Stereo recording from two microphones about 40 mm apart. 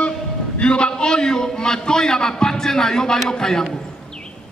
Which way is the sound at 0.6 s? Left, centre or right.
Left.